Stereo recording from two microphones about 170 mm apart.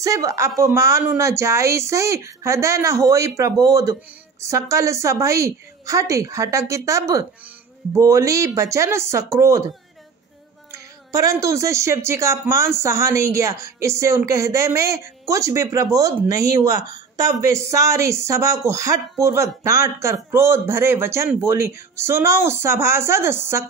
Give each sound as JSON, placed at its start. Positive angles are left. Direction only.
{"t": 0.0, "sound": "a woman's voice", "side_deg": -20}
{"t": 10.7, "sound": "speech", "side_deg": -20}